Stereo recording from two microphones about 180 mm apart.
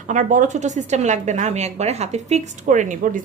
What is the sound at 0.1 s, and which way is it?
A woman's voice, 45° right (ahead or behind).